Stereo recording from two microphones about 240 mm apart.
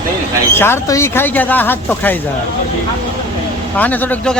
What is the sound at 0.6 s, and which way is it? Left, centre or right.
Speech, centre.